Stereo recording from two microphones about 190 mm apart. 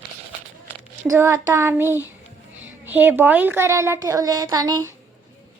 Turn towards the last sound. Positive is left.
turn(degrees=-20)  # may be behind; listen again after turning